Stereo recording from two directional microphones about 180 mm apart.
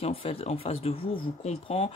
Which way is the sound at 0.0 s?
30° left (ahead or behind).